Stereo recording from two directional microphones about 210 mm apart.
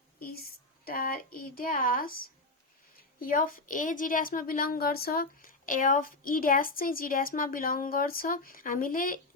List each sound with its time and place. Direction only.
0.3 s speech: 45° left (ahead or behind)
3.2 s a woman's voice: 40° left (ahead or behind)